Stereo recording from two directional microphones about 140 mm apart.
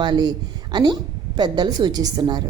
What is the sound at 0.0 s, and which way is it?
A woman's voice, 30° right (ahead or behind).